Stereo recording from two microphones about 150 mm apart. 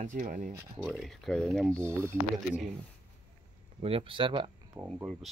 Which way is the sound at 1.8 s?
15° right (ahead or behind).